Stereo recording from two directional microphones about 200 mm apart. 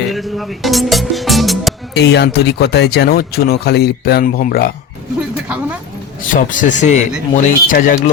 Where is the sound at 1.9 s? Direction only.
60° left (ahead or behind).